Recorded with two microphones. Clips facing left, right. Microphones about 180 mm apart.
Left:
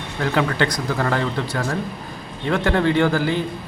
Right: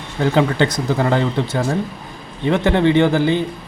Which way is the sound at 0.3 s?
25° right (ahead or behind).